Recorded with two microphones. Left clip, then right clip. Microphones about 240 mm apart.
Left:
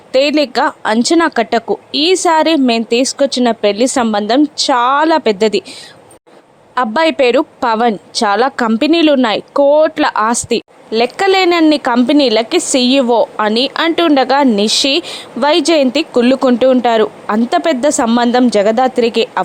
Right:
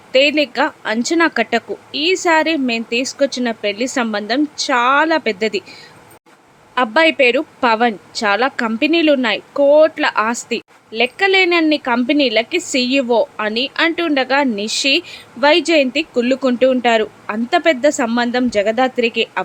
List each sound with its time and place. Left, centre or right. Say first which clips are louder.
0.1 s speech: left 2 dB; centre
6.7 s a woman's voice: left 1 dB; centre